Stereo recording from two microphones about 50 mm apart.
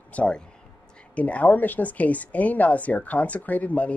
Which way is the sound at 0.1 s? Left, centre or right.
Left.